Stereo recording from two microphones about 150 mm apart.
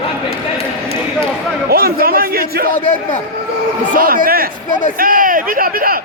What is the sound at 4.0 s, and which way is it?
Speech, 70° right (ahead or behind).